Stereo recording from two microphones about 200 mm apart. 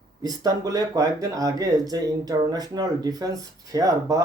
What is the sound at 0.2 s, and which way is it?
Speech, 20° right (ahead or behind).